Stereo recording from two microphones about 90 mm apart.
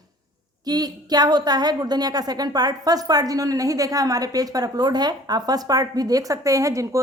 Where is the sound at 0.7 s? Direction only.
45° right (ahead or behind).